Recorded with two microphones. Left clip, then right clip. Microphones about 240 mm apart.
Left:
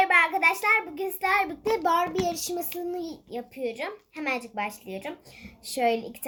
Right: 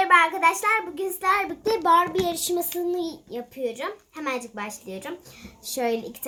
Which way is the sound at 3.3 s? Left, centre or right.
Centre.